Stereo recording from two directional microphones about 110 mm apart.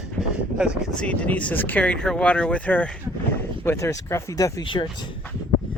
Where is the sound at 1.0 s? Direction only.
10° left (ahead or behind).